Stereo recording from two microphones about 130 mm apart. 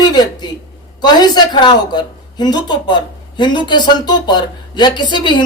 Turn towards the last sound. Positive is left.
turn(degrees=35)  # may be behind; listen again after turning